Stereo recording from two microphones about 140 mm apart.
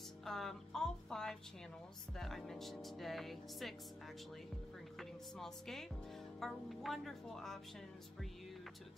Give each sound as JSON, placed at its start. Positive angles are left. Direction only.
{"t": 0.2, "sound": "a sound", "side_deg": 0}
{"t": 2.1, "sound": "speech", "side_deg": 0}
{"t": 4.9, "sound": "music", "side_deg": 0}
{"t": 6.4, "sound": "speech", "side_deg": 0}